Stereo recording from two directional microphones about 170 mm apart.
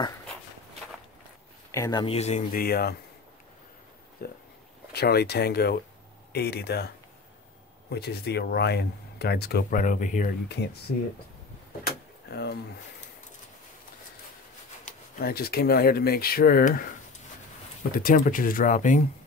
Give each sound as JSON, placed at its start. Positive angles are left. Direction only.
{"t": 1.7, "sound": "speech", "side_deg": 20}
{"t": 2.0, "sound": "speech", "side_deg": 40}
{"t": 2.5, "sound": "speech", "side_deg": 60}
{"t": 4.2, "sound": "a sound", "side_deg": 60}
{"t": 4.9, "sound": "speech", "side_deg": 70}
{"t": 7.9, "sound": "speech", "side_deg": 70}
{"t": 10.6, "sound": "speech", "side_deg": 75}
{"t": 12.3, "sound": "speech", "side_deg": 70}
{"t": 14.9, "sound": "speech", "side_deg": 60}
{"t": 17.9, "sound": "speech", "side_deg": 55}